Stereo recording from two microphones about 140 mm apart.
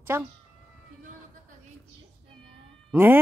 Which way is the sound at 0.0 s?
15° right (ahead or behind).